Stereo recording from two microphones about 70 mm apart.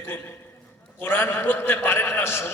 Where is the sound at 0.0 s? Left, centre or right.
Left.